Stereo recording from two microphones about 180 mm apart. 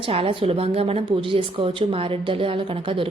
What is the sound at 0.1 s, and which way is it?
A woman's voice, 35° right (ahead or behind).